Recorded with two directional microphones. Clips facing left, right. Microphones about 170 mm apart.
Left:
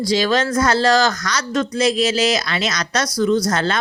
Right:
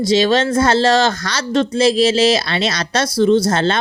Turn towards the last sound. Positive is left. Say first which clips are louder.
# right 4 dB
turn(degrees=-25)  # may be behind; listen again after turning